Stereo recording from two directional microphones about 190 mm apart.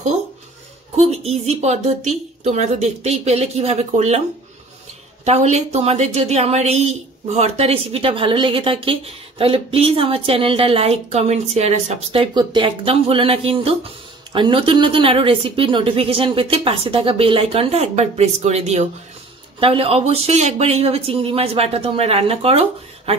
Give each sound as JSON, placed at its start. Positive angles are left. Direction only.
{"t": 0.9, "sound": "a woman's voice", "side_deg": -35}
{"t": 5.2, "sound": "a woman's voice", "side_deg": -35}